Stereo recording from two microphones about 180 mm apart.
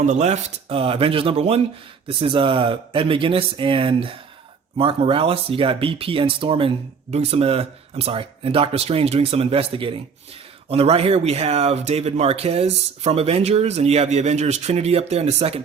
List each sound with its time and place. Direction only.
0.0 s speech: 40° right (ahead or behind)